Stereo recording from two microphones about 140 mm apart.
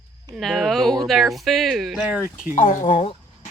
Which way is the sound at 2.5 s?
70° left (ahead or behind).